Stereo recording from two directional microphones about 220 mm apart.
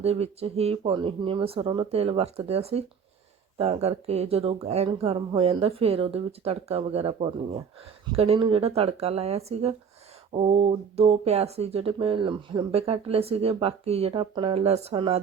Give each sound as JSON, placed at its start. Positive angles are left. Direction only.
{"t": 0.0, "sound": "speech", "side_deg": -30}